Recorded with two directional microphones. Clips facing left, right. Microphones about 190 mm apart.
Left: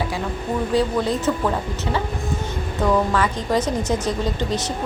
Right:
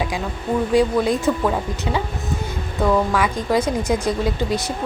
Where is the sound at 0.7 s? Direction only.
10° right (ahead or behind).